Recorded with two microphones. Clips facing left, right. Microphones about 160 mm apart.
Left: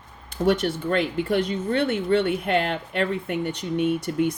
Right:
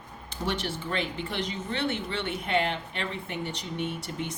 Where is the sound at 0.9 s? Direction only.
50° left (ahead or behind).